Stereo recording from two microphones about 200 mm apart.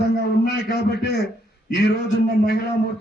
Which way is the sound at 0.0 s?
55° left (ahead or behind).